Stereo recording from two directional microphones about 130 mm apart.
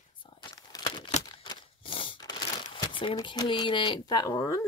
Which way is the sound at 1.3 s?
40° left (ahead or behind).